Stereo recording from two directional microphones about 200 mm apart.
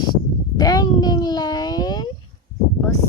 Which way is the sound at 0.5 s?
20° left (ahead or behind).